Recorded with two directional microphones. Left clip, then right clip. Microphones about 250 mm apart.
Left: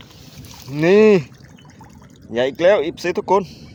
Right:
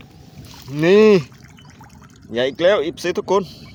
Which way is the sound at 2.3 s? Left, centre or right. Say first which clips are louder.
Left 1 dB; centre.